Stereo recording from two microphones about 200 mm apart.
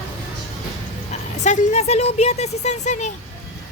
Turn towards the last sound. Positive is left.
turn(degrees=35)  # may be behind; listen again after turning